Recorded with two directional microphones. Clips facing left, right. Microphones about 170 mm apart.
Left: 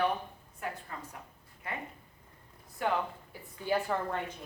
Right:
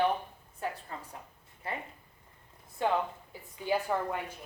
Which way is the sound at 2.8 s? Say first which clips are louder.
Right 2 dB; 25° right (ahead or behind).